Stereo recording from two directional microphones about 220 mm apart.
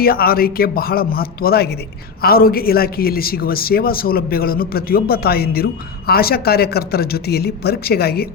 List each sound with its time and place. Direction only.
0.0 s a man's voice: 45° left (ahead or behind)